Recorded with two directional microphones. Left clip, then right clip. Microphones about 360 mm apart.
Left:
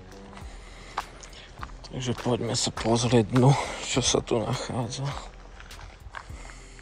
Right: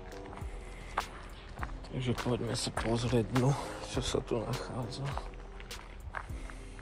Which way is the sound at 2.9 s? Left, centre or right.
Centre.